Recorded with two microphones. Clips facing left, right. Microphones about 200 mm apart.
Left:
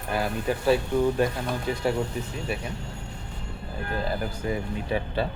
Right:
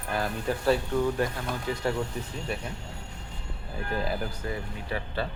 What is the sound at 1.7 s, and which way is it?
Speech, 20° left (ahead or behind).